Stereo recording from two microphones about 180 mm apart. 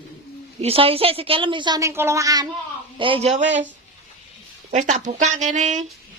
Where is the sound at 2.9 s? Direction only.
30° right (ahead or behind).